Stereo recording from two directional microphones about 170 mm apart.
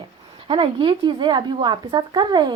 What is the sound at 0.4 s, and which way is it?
A woman's voice, 30° right (ahead or behind).